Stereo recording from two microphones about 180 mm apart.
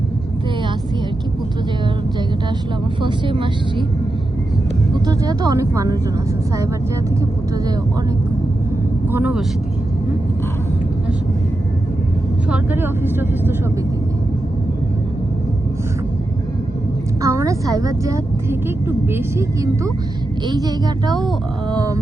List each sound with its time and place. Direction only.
3.0 s speech: 25° right (ahead or behind)
5.0 s speech: 20° right (ahead or behind)
9.0 s speech: 10° right (ahead or behind)
12.5 s a woman's voice: 10° right (ahead or behind)
17.2 s a woman's voice: 15° right (ahead or behind)